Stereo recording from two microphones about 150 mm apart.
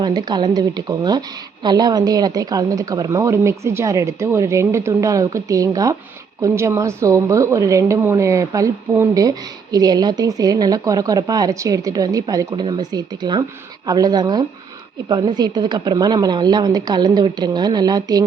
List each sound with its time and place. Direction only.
0.0 s a woman's voice: 25° right (ahead or behind)